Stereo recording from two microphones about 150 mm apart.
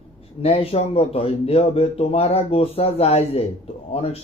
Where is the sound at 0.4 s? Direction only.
40° left (ahead or behind).